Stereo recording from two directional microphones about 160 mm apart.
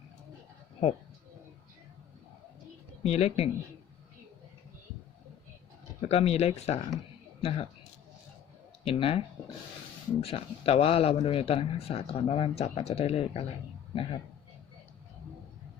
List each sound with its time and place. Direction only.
3.0 s speech: 40° left (ahead or behind)
6.1 s speech: 40° left (ahead or behind)
8.8 s speech: 35° left (ahead or behind)